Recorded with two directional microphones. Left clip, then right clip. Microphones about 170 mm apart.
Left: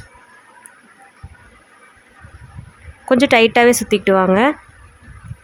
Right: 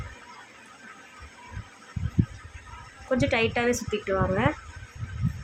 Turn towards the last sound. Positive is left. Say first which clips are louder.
# left 12 dB
turn(degrees=65)  # may be behind; listen again after turning